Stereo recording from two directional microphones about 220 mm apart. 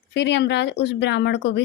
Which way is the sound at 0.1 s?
50° left (ahead or behind).